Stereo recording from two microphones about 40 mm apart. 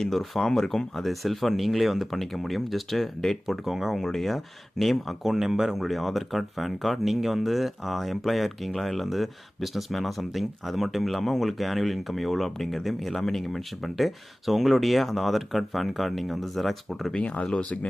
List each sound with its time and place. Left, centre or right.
0.0 s speech: centre
3.4 s speech: centre
3.9 s speech: centre
5.7 s speech: centre
17.2 s speech: left